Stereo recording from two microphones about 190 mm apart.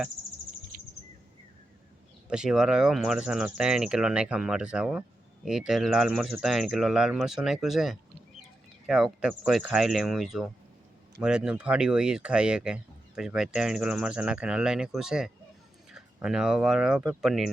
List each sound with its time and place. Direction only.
0.7 s bird: 50° right (ahead or behind)
2.3 s speech: 5° right (ahead or behind)